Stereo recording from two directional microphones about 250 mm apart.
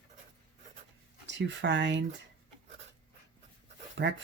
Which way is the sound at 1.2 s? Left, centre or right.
Right.